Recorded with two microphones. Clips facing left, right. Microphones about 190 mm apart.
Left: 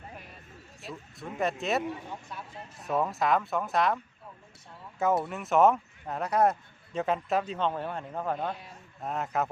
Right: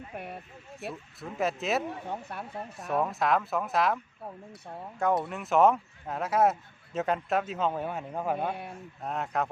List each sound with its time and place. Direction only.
0.2 s speech: 60° right (ahead or behind)
1.2 s speech: centre (ahead or behind)
2.0 s speech: 60° right (ahead or behind)
2.8 s speech: centre (ahead or behind)
4.6 s speech: 55° right (ahead or behind)
4.9 s speech: 5° left (ahead or behind)